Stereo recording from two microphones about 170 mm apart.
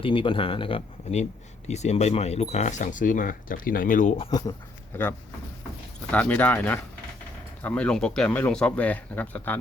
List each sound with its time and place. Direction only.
0.0 s speech: 30° left (ahead or behind); by 4.1 s 50° left (ahead or behind)
4.2 s speech: 25° left (ahead or behind)
6.1 s speech: 10° left (ahead or behind)